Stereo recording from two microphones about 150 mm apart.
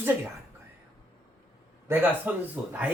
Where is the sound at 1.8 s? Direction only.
10° right (ahead or behind).